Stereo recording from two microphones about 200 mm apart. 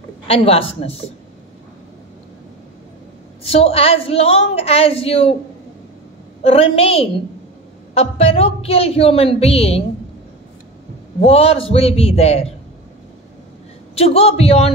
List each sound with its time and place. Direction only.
0.3 s a woman's voice: 30° left (ahead or behind)
3.4 s a woman's voice: 30° left (ahead or behind)
6.4 s a woman's voice: 30° left (ahead or behind)
11.1 s a woman's voice: 30° left (ahead or behind)
13.9 s a man's voice: 30° left (ahead or behind)